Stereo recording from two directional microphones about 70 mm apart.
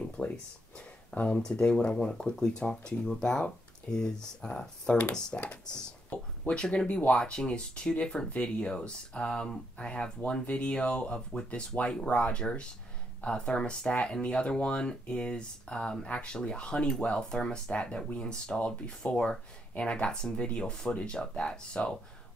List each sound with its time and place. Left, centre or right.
0.2 s speech: left